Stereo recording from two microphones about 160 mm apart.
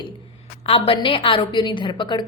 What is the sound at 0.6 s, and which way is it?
A woman's voice, 35° left (ahead or behind).